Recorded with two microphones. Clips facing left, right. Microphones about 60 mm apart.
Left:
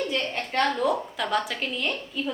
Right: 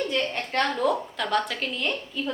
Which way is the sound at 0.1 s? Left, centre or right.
Centre.